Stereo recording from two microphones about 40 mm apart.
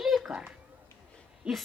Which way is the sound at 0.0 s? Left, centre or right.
Centre.